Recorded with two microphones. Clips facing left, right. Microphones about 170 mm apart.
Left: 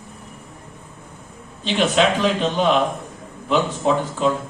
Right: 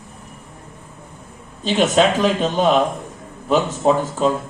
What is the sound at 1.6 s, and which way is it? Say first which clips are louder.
A man's voice: right 2 dB; 40° right (ahead or behind).